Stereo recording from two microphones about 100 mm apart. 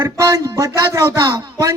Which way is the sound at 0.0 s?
35° right (ahead or behind).